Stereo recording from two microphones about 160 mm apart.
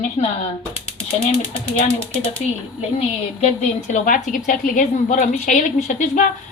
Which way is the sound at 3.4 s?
45° left (ahead or behind).